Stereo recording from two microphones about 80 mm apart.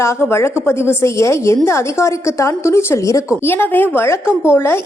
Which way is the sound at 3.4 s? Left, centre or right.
Left.